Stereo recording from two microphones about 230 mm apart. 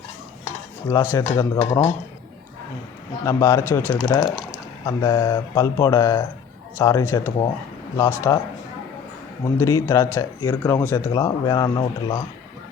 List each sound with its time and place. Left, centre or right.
0.9 s speech: centre
1.5 s speech: left
3.2 s speech: centre
9.6 s speech: centre